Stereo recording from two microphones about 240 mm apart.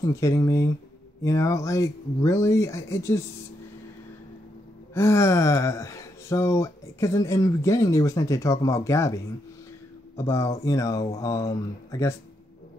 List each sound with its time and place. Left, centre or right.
0.0 s speech: centre
4.9 s speech: centre